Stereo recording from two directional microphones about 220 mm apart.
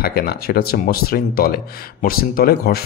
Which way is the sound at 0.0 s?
45° left (ahead or behind).